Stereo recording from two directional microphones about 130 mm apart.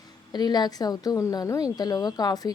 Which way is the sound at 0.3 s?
30° left (ahead or behind).